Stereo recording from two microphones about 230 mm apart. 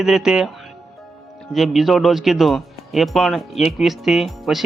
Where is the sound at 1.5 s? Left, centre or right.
Centre.